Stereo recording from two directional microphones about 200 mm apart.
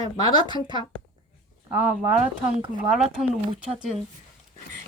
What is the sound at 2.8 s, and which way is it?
Speech, 5° right (ahead or behind).